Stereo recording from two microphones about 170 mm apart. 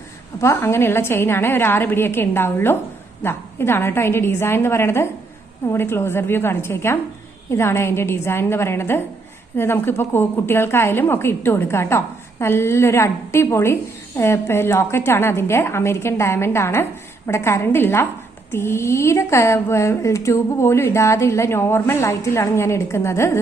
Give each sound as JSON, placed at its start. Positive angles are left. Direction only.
{"t": 0.4, "sound": "speech", "side_deg": 15}